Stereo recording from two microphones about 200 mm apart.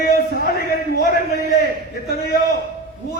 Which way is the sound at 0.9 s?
50° left (ahead or behind).